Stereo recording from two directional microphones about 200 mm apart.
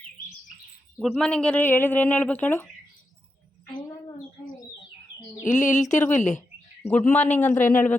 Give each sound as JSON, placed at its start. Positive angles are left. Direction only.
{"t": 0.9, "sound": "speech", "side_deg": 5}
{"t": 5.5, "sound": "speech", "side_deg": 40}
{"t": 6.9, "sound": "speech", "side_deg": 5}